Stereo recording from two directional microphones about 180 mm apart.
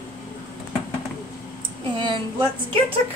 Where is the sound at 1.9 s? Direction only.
25° right (ahead or behind).